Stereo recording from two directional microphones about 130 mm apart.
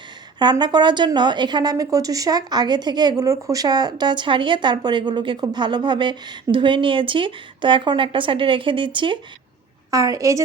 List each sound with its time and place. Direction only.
0.6 s a woman's voice: 35° right (ahead or behind)
9.9 s a woman's voice: 25° right (ahead or behind)